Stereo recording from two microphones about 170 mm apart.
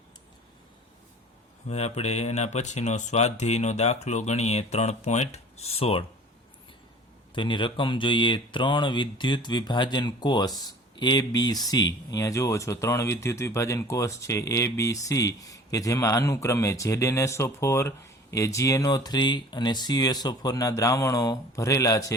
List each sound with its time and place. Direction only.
1.6 s speech: 40° left (ahead or behind)
7.3 s speech: 30° left (ahead or behind)